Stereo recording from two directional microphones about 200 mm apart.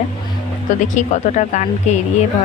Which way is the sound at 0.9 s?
40° left (ahead or behind).